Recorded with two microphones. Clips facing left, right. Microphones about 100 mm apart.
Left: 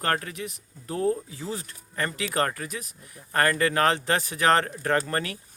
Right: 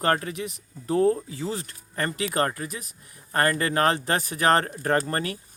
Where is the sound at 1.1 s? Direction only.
55° right (ahead or behind).